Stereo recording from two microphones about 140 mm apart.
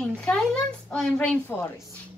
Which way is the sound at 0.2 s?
5° left (ahead or behind).